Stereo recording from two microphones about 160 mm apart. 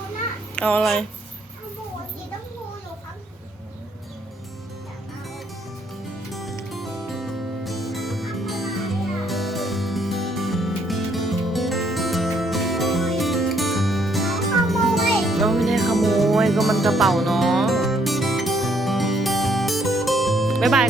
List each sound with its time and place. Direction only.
0.5 s speech: 10° left (ahead or behind)
6.3 s music: centre (ahead or behind)